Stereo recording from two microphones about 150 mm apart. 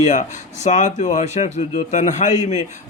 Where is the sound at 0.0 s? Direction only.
55° left (ahead or behind).